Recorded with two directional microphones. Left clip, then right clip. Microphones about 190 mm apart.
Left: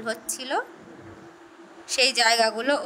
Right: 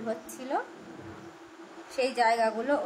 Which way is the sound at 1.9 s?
60° left (ahead or behind).